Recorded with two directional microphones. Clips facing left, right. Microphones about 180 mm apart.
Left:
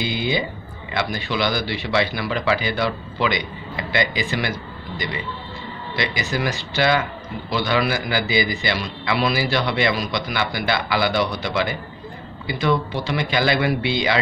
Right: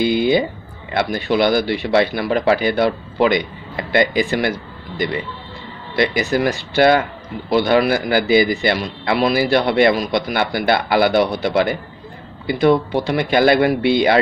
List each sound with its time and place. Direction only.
0.0 s speech: 50° right (ahead or behind)